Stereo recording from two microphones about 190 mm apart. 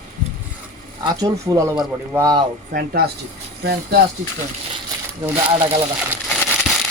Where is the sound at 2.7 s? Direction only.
50° right (ahead or behind).